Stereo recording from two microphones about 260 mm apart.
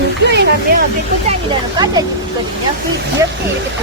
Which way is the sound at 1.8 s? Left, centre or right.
Centre.